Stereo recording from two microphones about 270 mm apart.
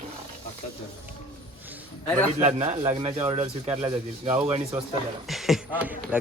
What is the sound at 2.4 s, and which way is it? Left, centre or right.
Speech, right.